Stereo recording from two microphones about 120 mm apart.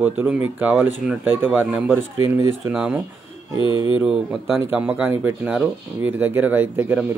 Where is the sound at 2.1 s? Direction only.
25° right (ahead or behind).